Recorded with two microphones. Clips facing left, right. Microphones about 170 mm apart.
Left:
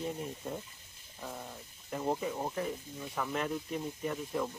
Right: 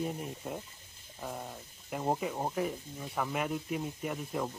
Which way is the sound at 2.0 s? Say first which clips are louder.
Right 1 dB; 25° right (ahead or behind).